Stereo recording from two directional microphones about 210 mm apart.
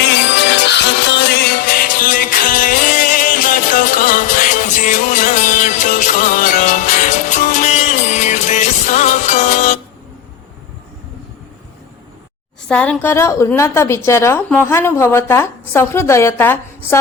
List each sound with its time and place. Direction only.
0.0 s music: 55° left (ahead or behind); by 9.7 s 35° left (ahead or behind)
12.6 s a woman's voice: 5° left (ahead or behind)